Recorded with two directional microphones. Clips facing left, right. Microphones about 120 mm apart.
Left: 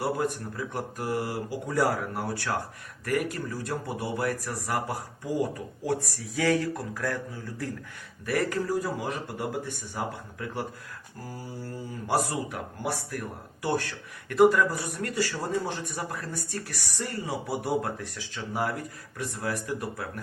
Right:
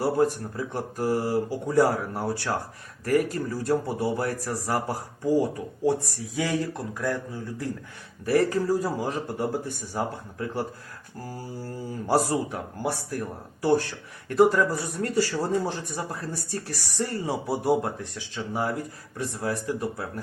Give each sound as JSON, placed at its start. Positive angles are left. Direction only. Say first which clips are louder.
{"t": 0.0, "sound": "speech", "louder": "right 5 dB", "side_deg": -30}
{"t": 8.2, "sound": "speech", "louder": "right 5 dB", "side_deg": -30}
{"t": 12.0, "sound": "speech", "louder": "right 4 dB", "side_deg": -30}